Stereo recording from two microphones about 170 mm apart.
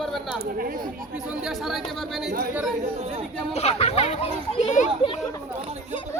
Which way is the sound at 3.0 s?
35° right (ahead or behind).